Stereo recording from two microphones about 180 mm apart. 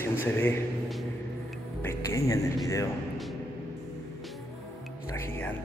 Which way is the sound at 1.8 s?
15° left (ahead or behind).